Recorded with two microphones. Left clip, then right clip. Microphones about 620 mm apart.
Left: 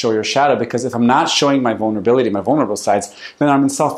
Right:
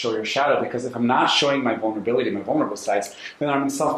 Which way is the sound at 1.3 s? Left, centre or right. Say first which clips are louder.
Left 5 dB; left.